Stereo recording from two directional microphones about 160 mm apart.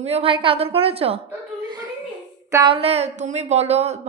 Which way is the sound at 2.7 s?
40° right (ahead or behind).